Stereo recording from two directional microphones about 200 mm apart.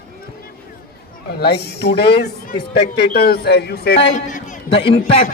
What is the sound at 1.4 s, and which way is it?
Speech, 55° left (ahead or behind).